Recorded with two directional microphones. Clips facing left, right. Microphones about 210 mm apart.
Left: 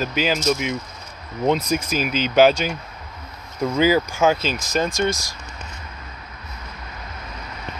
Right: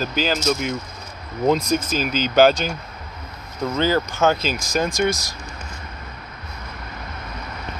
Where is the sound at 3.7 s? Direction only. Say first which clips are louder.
Left 2 dB; 10° left (ahead or behind).